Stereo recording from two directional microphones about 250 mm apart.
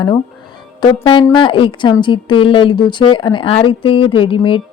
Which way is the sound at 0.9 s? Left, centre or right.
Centre.